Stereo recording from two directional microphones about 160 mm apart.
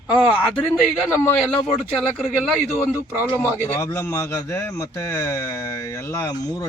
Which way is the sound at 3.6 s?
15° left (ahead or behind).